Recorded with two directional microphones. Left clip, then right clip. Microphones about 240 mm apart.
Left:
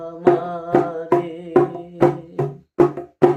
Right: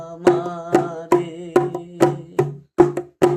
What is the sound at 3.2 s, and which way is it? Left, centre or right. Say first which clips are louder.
Music: left 2 dB; right.